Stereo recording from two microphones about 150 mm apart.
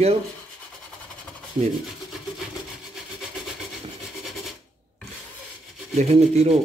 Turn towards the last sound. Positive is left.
turn(degrees=-45)  # may be behind; listen again after turning